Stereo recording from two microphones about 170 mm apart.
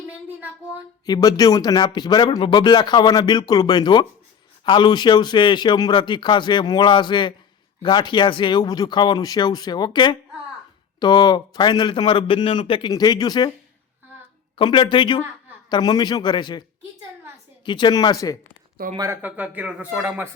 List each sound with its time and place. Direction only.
0.3 s speech: 10° right (ahead or behind)
1.0 s a man's voice: 25° left (ahead or behind)
14.5 s a man's voice: 30° left (ahead or behind)
17.7 s a man's voice: 25° left (ahead or behind)
18.9 s a man's voice: 15° right (ahead or behind)